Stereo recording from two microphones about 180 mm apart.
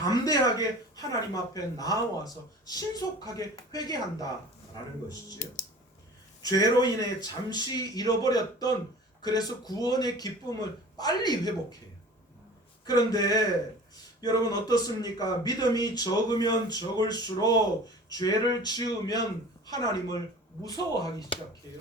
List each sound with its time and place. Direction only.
0.0 s speech: 20° left (ahead or behind)
6.4 s speech: 20° left (ahead or behind)
12.8 s speech: 20° left (ahead or behind)